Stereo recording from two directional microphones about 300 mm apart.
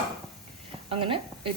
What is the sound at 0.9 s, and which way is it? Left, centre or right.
Speech, centre.